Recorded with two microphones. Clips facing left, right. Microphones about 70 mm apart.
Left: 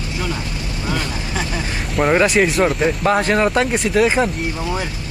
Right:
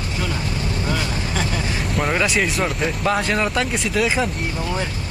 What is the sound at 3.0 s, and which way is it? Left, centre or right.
Speech, left.